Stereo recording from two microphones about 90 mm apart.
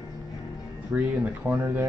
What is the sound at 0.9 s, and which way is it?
Speech, 15° right (ahead or behind).